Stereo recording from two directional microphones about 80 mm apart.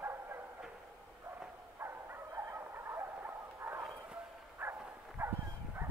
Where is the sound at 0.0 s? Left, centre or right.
Right.